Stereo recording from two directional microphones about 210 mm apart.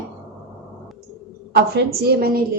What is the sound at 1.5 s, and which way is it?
Speech, 50° right (ahead or behind).